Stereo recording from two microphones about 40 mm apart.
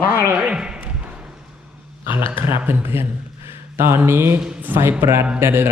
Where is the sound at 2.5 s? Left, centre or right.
Right.